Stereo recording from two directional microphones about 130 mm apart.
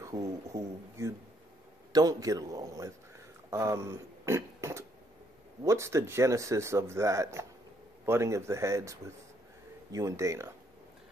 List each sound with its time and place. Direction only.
0.0 s a man's voice: 25° right (ahead or behind)